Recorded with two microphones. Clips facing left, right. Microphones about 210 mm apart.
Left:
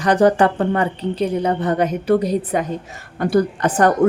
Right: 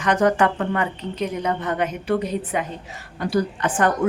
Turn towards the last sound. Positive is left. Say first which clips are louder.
# left 5 dB
turn(degrees=40)  # may be behind; listen again after turning